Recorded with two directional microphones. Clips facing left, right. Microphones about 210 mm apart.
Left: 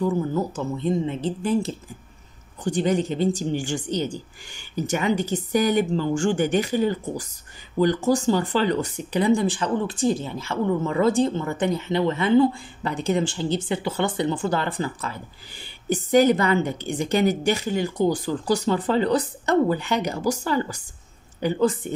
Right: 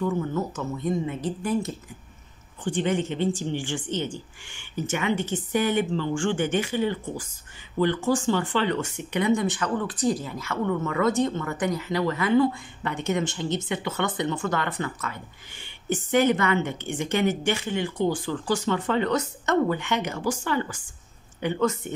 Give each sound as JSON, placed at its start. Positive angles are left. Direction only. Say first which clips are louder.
{"t": 0.0, "sound": "speech", "louder": "left 3 dB", "side_deg": 35}